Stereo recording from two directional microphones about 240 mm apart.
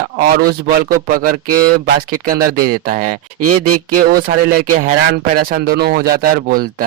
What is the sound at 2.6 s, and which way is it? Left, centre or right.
Speech, right.